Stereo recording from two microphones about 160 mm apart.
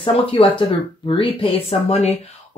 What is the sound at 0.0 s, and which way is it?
Speech, 35° left (ahead or behind).